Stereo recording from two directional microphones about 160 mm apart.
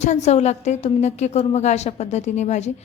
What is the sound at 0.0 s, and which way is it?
A woman's voice, 45° left (ahead or behind).